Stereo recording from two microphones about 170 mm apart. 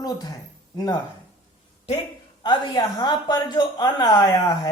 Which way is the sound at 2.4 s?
25° left (ahead or behind).